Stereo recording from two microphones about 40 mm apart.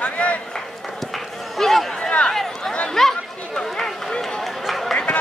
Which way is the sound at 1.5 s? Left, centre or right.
Centre.